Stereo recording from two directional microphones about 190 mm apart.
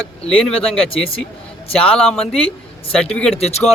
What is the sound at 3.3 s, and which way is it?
Speech, 35° left (ahead or behind).